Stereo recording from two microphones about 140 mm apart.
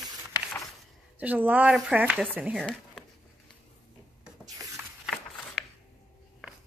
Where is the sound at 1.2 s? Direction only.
10° right (ahead or behind).